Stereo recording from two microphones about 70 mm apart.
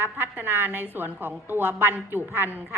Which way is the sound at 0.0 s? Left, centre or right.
Right.